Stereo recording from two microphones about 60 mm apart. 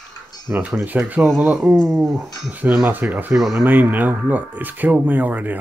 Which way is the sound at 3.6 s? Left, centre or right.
Right.